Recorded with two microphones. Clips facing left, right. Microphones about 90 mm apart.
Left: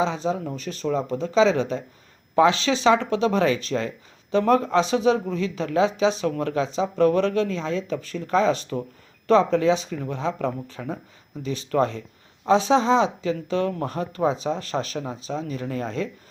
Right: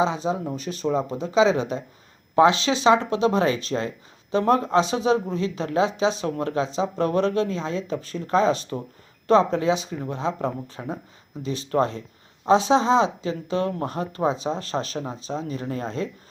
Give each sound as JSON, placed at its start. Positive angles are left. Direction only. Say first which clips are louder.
{"t": 0.0, "sound": "speech", "louder": "right 1 dB", "side_deg": -15}